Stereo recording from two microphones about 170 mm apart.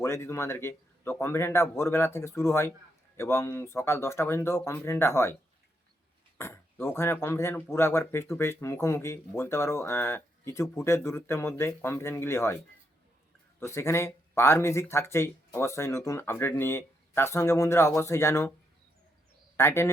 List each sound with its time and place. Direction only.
0.0 s speech: 15° left (ahead or behind)
6.3 s speech: 15° left (ahead or behind)
13.7 s speech: 15° left (ahead or behind)
19.5 s speech: 15° left (ahead or behind)